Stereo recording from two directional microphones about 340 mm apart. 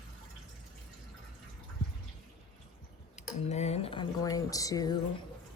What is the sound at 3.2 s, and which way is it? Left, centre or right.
Tick, centre.